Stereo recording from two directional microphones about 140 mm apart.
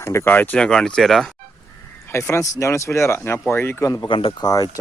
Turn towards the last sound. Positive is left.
turn(degrees=25)  # may be behind; listen again after turning